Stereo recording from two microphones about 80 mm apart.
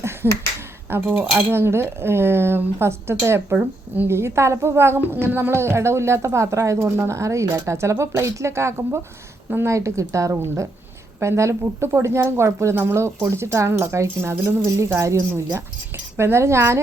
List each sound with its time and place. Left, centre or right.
0.9 s a woman's voice: right